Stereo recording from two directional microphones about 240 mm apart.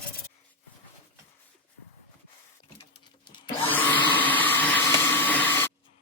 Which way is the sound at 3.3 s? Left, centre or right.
Left.